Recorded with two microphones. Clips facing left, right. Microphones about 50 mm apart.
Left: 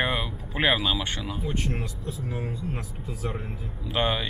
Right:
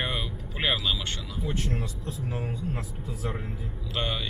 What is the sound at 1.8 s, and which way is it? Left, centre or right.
Speech, centre.